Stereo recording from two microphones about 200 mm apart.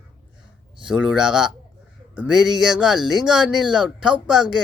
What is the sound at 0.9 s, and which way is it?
Speech, 5° right (ahead or behind).